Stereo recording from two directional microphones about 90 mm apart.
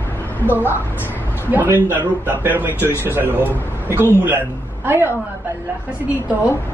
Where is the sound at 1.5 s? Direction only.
20° right (ahead or behind).